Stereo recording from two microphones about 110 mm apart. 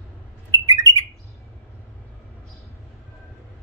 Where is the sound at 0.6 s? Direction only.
30° right (ahead or behind).